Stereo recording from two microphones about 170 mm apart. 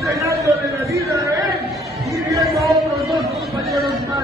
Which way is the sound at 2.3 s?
20° right (ahead or behind).